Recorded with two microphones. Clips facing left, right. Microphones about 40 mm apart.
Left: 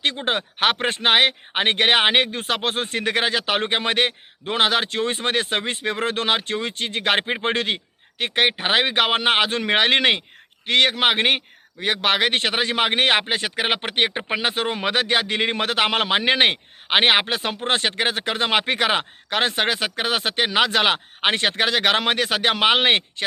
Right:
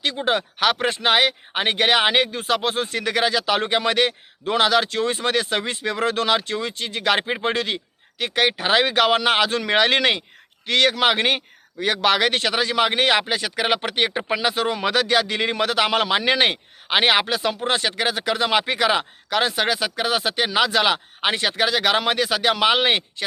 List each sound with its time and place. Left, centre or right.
0.3 s a man's voice: left